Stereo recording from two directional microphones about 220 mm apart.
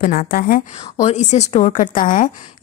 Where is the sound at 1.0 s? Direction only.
30° left (ahead or behind).